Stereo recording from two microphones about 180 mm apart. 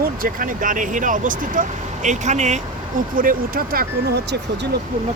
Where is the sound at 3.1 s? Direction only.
50° right (ahead or behind).